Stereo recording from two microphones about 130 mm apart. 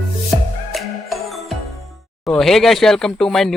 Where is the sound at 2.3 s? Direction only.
5° left (ahead or behind).